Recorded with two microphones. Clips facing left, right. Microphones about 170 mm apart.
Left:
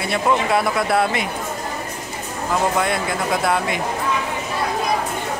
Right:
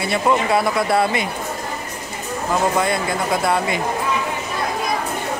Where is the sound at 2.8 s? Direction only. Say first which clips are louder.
Right 1 dB; centre (ahead or behind).